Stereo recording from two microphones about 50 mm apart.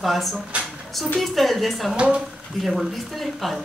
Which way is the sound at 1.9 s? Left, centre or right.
Right.